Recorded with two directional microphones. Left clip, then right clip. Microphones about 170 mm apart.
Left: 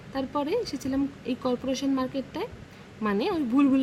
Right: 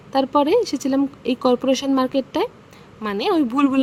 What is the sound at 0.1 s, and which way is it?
Speech, 40° right (ahead or behind).